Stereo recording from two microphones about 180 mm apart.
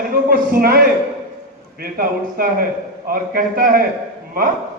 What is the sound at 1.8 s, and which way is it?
A man's voice, 55° right (ahead or behind).